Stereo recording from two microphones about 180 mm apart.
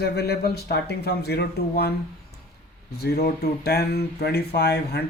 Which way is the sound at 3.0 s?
60° left (ahead or behind).